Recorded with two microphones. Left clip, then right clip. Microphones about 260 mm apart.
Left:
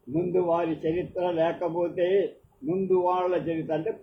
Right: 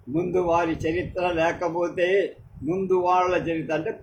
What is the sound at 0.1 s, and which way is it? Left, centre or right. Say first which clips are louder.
A man's voice: right 2 dB; right.